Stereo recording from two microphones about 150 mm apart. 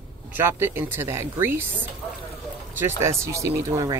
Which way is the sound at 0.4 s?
15° right (ahead or behind).